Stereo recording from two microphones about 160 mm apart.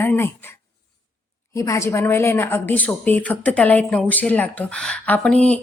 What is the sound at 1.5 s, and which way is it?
A woman's voice, 20° left (ahead or behind).